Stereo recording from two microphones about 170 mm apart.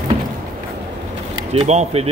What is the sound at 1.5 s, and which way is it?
Speech, 40° right (ahead or behind).